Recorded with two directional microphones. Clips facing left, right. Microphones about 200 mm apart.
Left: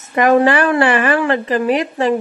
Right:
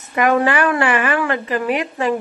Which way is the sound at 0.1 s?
35° left (ahead or behind).